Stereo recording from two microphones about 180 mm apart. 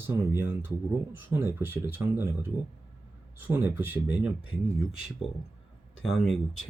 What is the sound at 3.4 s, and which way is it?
Speech, 15° right (ahead or behind).